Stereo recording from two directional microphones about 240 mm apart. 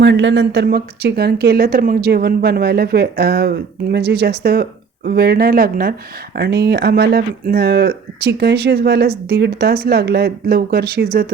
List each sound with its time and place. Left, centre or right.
0.0 s speech: right